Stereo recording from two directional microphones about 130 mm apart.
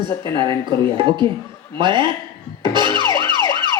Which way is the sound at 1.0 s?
35° right (ahead or behind).